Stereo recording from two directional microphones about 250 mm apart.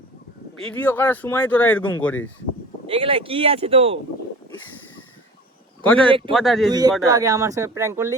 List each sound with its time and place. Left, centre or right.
0.6 s speech: centre
2.8 s speech: right
5.8 s speech: centre
6.7 s speech: centre